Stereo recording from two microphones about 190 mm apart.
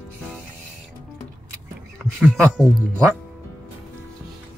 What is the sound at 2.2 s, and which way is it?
Speech, centre (ahead or behind).